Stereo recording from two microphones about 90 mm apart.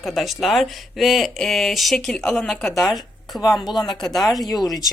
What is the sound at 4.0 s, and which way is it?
Speech, centre (ahead or behind).